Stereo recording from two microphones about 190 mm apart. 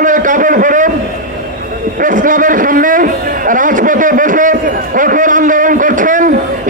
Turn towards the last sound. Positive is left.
turn(degrees=-45)  # may be behind; listen again after turning